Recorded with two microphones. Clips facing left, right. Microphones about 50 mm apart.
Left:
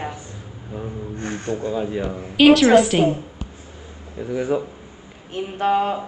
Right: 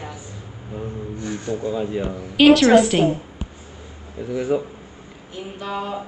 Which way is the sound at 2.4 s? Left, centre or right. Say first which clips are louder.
Even; centre.